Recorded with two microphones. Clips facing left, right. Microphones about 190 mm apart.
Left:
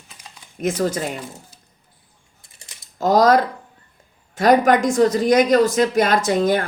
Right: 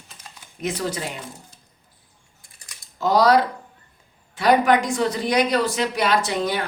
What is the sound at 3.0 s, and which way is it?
Speech, 45° left (ahead or behind).